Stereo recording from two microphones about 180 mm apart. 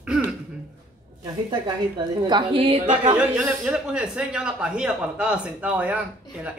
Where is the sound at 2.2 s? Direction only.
25° right (ahead or behind).